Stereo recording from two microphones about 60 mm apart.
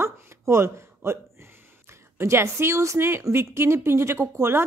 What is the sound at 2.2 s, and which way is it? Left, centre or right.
Speech, right.